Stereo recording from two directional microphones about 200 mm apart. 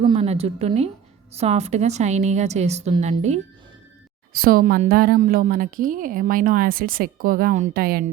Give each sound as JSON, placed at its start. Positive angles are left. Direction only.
{"t": 0.0, "sound": "a woman's voice", "side_deg": -25}
{"t": 4.3, "sound": "a woman's voice", "side_deg": -45}